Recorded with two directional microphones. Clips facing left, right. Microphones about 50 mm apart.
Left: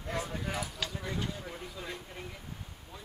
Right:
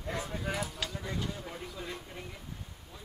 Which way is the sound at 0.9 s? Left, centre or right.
Centre.